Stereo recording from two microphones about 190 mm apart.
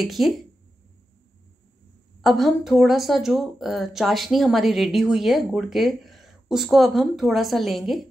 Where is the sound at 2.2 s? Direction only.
Centre (ahead or behind).